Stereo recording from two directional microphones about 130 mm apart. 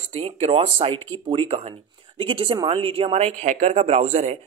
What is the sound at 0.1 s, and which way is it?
Speech, 50° right (ahead or behind).